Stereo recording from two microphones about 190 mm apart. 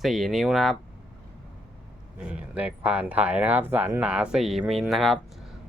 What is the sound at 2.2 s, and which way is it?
Speech, 5° right (ahead or behind).